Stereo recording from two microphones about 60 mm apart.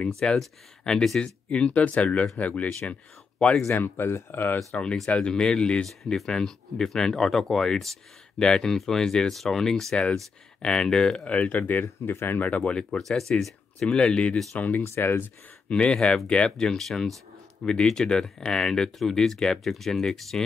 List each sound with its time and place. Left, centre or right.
0.2 s speech: centre
1.5 s speech: centre
3.6 s speech: left
5.1 s speech: centre
11.2 s speech: left
11.8 s speech: left
12.4 s speech: left
13.3 s speech: centre
13.7 s speech: centre
14.3 s speech: centre
14.8 s speech: left
15.7 s speech: centre